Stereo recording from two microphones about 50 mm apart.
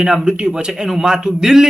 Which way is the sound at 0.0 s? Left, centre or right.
Centre.